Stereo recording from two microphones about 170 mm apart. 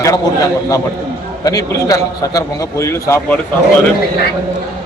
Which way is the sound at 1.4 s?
20° left (ahead or behind).